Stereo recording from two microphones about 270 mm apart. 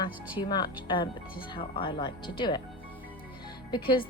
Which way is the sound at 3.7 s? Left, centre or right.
Centre.